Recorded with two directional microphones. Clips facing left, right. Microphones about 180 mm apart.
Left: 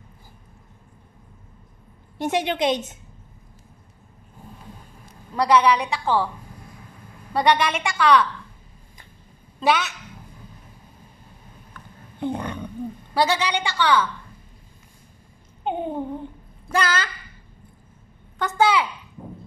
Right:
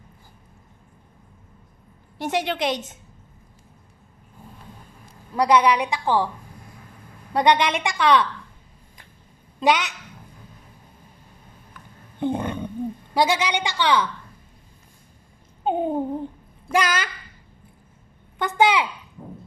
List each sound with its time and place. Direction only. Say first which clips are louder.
2.1 s a woman's voice: left 2 dB; 20° left (ahead or behind)
5.3 s a woman's voice: even; 10° right (ahead or behind)
7.3 s a woman's voice: right 1 dB; 15° right (ahead or behind)
9.6 s a woman's voice: right 1 dB; 15° right (ahead or behind)
11.7 s a sound: left 3 dB; 20° right (ahead or behind)
13.1 s a woman's voice: even; 10° right (ahead or behind)
15.6 s babbling: right 4 dB; 40° right (ahead or behind)
16.7 s a woman's voice: right 1 dB; 10° right (ahead or behind)
18.4 s a woman's voice: even; 15° right (ahead or behind)